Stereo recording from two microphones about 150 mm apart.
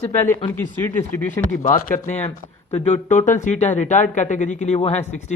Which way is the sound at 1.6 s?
65° left (ahead or behind).